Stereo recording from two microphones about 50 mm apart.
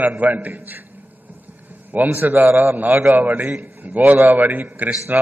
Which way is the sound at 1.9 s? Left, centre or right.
Right.